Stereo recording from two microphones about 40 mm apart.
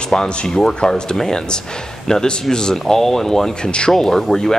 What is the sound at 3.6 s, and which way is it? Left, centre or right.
Speech, left.